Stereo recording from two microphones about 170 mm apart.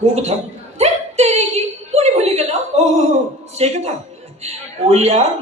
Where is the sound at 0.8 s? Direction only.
40° right (ahead or behind).